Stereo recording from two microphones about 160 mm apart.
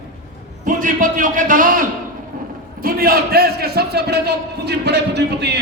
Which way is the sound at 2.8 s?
70° right (ahead or behind).